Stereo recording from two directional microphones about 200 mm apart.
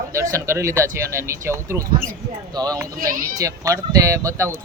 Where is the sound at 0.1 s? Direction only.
15° right (ahead or behind).